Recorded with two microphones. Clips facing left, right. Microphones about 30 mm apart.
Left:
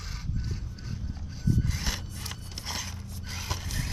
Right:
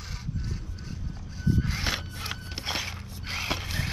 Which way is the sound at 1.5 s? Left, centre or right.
Right.